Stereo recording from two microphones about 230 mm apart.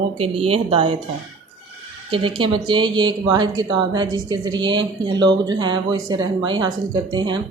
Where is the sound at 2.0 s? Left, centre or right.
Right.